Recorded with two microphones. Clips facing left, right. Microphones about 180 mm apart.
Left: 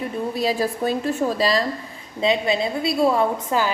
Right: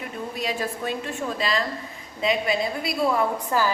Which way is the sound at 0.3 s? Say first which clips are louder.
Left 6 dB; 35° left (ahead or behind).